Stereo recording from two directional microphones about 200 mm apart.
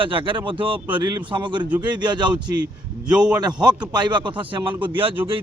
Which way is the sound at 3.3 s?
20° right (ahead or behind).